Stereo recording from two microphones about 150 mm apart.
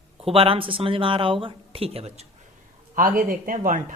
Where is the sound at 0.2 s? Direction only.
40° right (ahead or behind).